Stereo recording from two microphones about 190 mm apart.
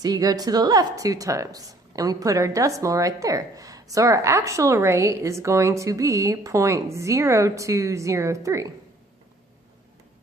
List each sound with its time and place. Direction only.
0.0 s speech: 20° right (ahead or behind)